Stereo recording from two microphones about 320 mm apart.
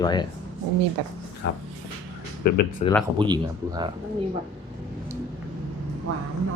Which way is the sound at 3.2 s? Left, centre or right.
Centre.